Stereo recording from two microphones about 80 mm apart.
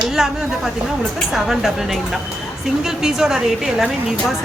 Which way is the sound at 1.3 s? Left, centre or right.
Centre.